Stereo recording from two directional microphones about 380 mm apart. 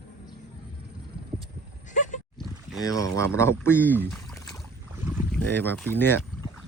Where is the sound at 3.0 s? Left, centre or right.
Right.